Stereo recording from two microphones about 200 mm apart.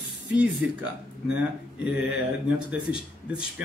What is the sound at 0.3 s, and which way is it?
Speech, 5° right (ahead or behind).